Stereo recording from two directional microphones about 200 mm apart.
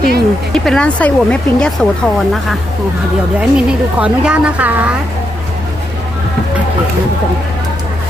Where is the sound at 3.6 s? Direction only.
5° right (ahead or behind).